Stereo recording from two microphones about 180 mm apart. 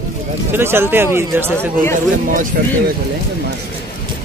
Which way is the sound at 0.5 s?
15° right (ahead or behind).